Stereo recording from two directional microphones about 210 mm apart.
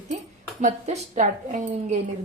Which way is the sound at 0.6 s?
35° right (ahead or behind).